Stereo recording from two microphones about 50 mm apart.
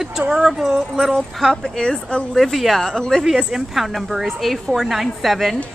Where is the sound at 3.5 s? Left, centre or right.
Centre.